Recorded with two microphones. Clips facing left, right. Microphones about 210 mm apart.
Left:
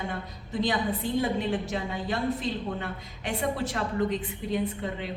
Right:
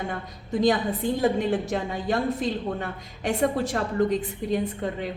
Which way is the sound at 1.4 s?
45° right (ahead or behind).